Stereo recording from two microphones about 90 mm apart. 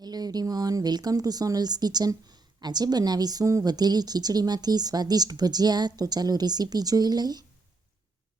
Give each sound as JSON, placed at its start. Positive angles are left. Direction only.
{"t": 0.0, "sound": "speech", "side_deg": -50}